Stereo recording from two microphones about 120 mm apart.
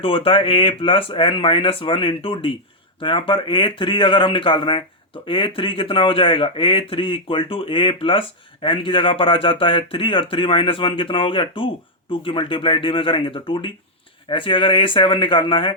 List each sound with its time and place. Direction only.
0.0 s speech: 50° left (ahead or behind)